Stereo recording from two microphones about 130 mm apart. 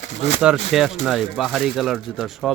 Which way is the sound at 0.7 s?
Centre (ahead or behind).